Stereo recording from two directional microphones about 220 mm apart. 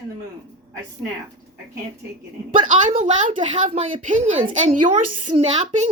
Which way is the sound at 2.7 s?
35° right (ahead or behind).